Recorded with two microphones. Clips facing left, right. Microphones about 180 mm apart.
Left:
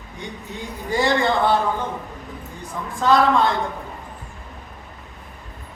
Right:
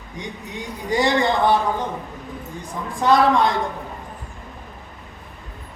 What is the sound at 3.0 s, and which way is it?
Speech, 15° right (ahead or behind).